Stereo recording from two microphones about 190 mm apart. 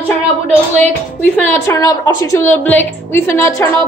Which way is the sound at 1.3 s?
15° left (ahead or behind).